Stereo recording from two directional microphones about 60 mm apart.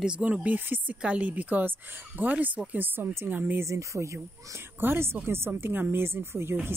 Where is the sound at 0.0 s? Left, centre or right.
Right.